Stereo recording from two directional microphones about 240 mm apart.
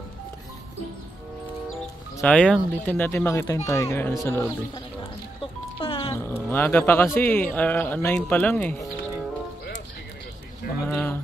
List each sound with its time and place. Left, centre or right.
2.1 s speech: centre
5.8 s music: left
6.1 s speech: centre
10.9 s a sound: centre